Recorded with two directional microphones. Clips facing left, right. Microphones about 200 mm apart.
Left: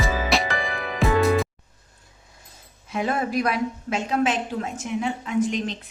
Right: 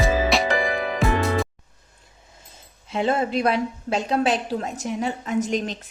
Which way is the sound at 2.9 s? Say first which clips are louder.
Right 3 dB; 25° right (ahead or behind).